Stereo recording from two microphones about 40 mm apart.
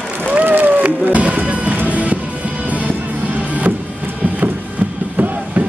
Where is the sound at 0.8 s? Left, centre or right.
Right.